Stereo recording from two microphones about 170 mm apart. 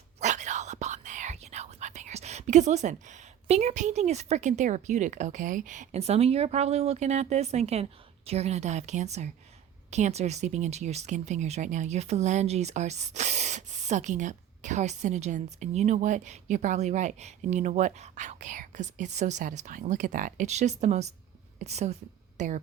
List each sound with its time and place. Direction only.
0.2 s a woman's voice: 45° right (ahead or behind)